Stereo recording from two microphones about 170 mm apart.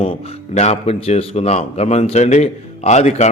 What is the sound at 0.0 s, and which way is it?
A man's voice, 35° left (ahead or behind).